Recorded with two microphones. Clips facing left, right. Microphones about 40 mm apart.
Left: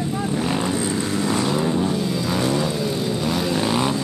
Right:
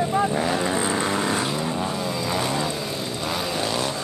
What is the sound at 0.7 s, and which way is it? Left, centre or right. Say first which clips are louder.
Vehicle: even; right.